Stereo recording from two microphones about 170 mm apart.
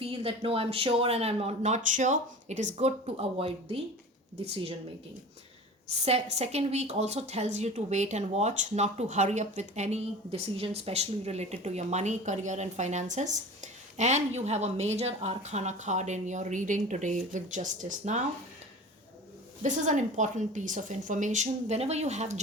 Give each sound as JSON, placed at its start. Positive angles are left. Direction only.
{"t": 0.0, "sound": "a woman's voice", "side_deg": -35}
{"t": 5.9, "sound": "a woman's voice", "side_deg": -35}
{"t": 19.6, "sound": "a woman's voice", "side_deg": -45}